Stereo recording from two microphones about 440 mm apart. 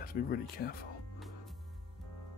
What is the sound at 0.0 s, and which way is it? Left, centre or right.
Speech, centre.